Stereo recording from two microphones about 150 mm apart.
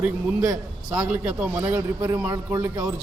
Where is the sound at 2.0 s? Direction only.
20° right (ahead or behind).